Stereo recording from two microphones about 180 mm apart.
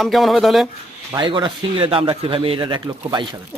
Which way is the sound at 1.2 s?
25° right (ahead or behind).